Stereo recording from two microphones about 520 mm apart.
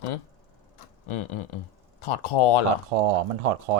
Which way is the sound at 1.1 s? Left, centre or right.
Left.